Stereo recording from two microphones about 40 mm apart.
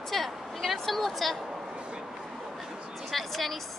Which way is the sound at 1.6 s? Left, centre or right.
Right.